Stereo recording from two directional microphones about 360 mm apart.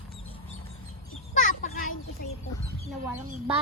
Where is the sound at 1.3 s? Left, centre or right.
Left.